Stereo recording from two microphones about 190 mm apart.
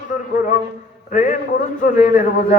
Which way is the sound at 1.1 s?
45° left (ahead or behind).